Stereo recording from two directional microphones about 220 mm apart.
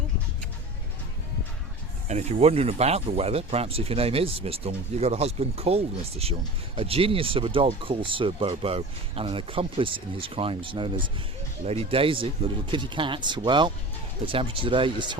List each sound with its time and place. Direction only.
2.0 s speech: 30° right (ahead or behind)